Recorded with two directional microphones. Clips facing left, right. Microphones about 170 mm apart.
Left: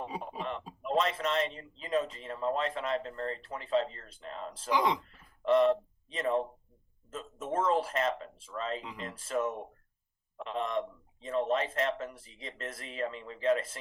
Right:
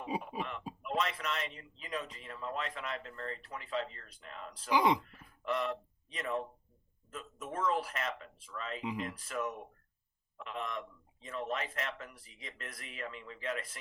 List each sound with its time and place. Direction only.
0.2 s a sound: 30° left (ahead or behind)
0.8 s speech: 30° left (ahead or behind)
4.7 s speech: 10° right (ahead or behind)
5.0 s a sound: 30° left (ahead or behind)
7.1 s speech: 30° left (ahead or behind)
8.8 s speech: 10° right (ahead or behind)
9.0 s a man's voice: 30° left (ahead or behind)